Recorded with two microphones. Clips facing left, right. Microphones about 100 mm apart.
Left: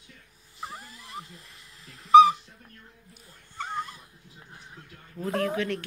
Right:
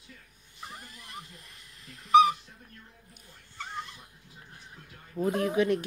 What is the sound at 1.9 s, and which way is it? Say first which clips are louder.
Dog: left 5 dB; 30° left (ahead or behind).